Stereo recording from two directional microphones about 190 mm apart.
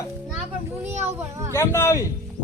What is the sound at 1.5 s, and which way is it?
Speech, 15° left (ahead or behind).